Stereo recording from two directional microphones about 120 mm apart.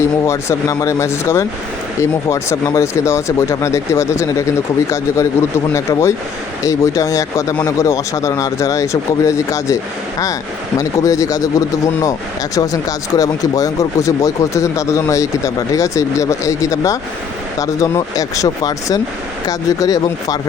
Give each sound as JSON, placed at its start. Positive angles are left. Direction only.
{"t": 0.0, "sound": "speech", "side_deg": 25}